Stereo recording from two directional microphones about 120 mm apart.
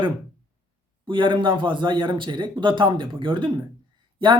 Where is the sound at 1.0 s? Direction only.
45° right (ahead or behind).